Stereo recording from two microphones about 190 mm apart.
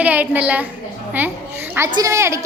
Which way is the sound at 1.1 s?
10° right (ahead or behind).